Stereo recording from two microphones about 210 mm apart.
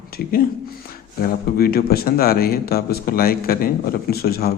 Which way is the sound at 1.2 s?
45° left (ahead or behind).